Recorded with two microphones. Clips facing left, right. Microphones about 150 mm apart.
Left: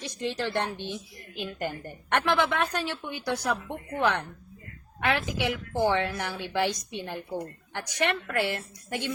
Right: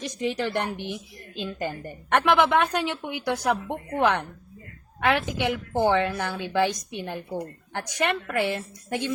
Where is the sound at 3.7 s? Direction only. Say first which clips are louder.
Right 2 dB; 60° right (ahead or behind).